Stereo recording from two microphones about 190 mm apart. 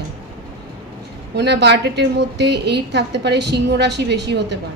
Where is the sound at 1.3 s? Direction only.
60° right (ahead or behind).